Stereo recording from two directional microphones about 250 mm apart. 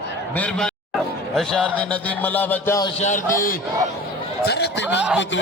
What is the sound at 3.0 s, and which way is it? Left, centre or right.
Speech, left.